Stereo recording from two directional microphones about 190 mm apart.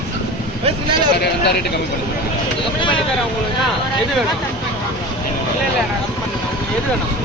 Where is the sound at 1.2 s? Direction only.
60° left (ahead or behind).